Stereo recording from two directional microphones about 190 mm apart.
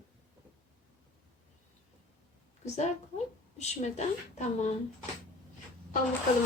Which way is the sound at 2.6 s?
35° left (ahead or behind).